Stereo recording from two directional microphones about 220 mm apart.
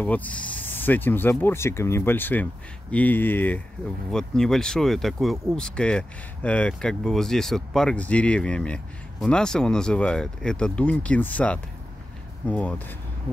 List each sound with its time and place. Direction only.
0.0 s speech: 5° left (ahead or behind)